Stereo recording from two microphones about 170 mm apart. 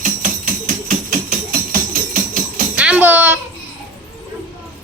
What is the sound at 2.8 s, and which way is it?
Music, 10° right (ahead or behind).